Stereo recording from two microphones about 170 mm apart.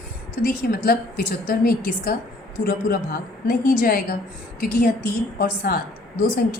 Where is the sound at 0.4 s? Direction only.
60° left (ahead or behind).